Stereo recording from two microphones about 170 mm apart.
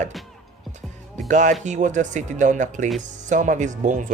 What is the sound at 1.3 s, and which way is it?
Speech, 45° right (ahead or behind).